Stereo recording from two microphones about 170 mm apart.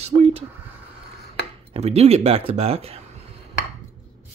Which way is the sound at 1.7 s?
40° right (ahead or behind).